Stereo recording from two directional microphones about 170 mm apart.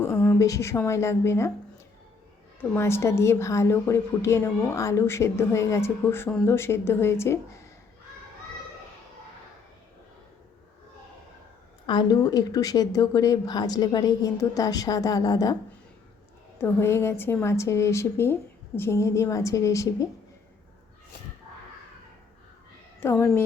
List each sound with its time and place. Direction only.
0.0 s a woman's voice: 15° left (ahead or behind)
2.6 s a woman's voice: 15° left (ahead or behind)
11.9 s a woman's voice: 25° left (ahead or behind)
16.6 s a woman's voice: 15° left (ahead or behind)
23.0 s a woman's voice: 15° left (ahead or behind)